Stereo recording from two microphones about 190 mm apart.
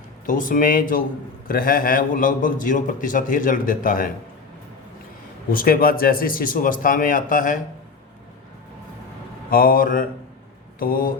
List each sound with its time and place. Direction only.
0.3 s a man's voice: 45° left (ahead or behind)
5.5 s a man's voice: 45° left (ahead or behind)
9.5 s a man's voice: 50° left (ahead or behind)